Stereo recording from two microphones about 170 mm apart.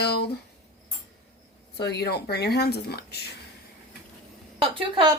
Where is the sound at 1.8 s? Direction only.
75° left (ahead or behind).